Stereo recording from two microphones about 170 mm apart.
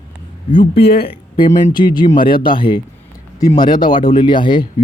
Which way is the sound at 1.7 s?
25° left (ahead or behind).